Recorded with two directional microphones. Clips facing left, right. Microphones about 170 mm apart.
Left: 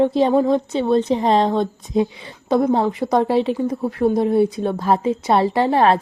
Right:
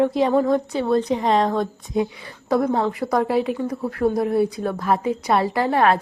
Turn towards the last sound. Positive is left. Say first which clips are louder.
# left 3 dB
turn(degrees=30)  # may be behind; listen again after turning